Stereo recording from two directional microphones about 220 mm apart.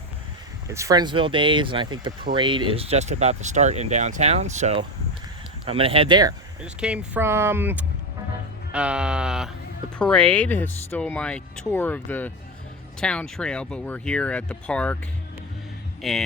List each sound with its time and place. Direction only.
0.7 s speech: 15° right (ahead or behind)
6.7 s speech: 5° right (ahead or behind)
16.0 s speech: centre (ahead or behind)